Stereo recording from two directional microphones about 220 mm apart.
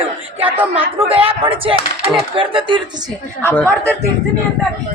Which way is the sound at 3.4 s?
10° left (ahead or behind).